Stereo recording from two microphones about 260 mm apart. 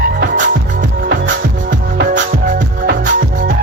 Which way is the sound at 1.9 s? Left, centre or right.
Right.